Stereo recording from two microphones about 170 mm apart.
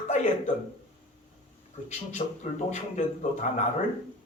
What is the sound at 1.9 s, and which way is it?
A man's voice, 45° left (ahead or behind).